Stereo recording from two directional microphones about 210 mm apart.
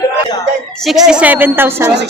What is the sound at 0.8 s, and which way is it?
A woman's voice, centre (ahead or behind).